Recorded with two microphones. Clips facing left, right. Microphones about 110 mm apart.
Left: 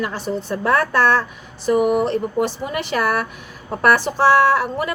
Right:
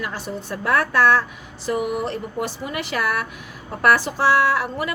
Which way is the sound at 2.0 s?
25° left (ahead or behind).